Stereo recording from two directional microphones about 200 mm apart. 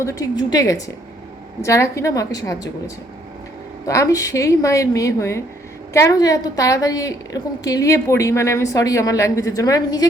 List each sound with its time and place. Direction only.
0.0 s a woman's voice: 15° left (ahead or behind)